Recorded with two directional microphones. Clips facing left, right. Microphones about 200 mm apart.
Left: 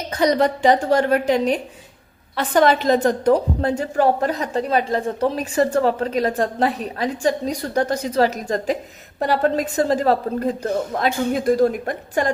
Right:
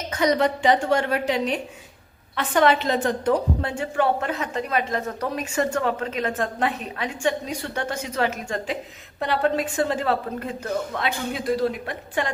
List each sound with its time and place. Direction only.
0.1 s a woman's voice: 35° left (ahead or behind)